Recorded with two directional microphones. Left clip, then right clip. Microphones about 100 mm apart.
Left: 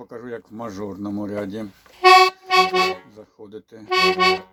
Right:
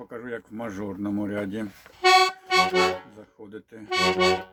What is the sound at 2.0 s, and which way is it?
Music, 15° left (ahead or behind).